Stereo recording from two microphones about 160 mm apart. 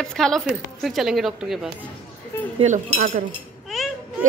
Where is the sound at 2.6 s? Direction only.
50° right (ahead or behind).